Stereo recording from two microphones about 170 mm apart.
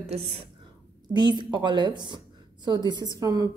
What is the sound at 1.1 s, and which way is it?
A woman's voice, 25° right (ahead or behind).